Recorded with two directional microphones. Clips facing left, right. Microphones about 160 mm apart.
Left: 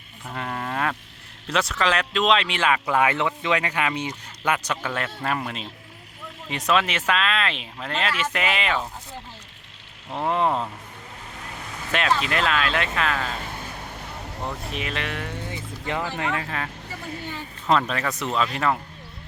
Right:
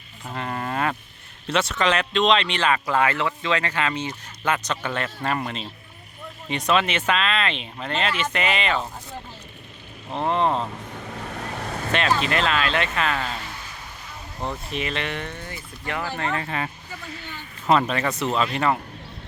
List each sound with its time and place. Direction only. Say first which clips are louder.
0.3 s speech: right 1 dB; centre (ahead or behind)
10.2 s speech: right 1 dB; 5° left (ahead or behind)
11.2 s vehicle: right 7 dB; 75° right (ahead or behind)
11.9 s speech: right 1 dB; 5° left (ahead or behind)
13.4 s a sound: left 3 dB; 50° left (ahead or behind)
14.4 s speech: right 3 dB; centre (ahead or behind)
15.4 s music: left 2 dB; 20° left (ahead or behind)
16.1 s speech: right 1 dB; 5° left (ahead or behind)
17.7 s speech: right 2 dB; 5° right (ahead or behind)